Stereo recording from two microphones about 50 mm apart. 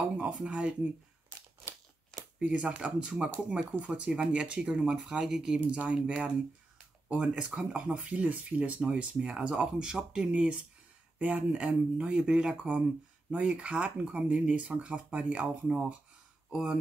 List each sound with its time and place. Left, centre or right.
0.4 s speech: right
2.4 s speech: right
5.7 s speech: right
16.4 s speech: centre